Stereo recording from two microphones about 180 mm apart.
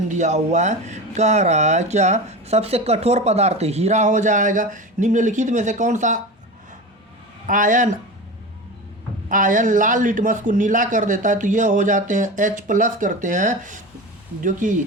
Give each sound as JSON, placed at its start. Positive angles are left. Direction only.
{"t": 0.1, "sound": "speech", "side_deg": -40}
{"t": 7.4, "sound": "a man's voice", "side_deg": -45}
{"t": 9.3, "sound": "a man's voice", "side_deg": -45}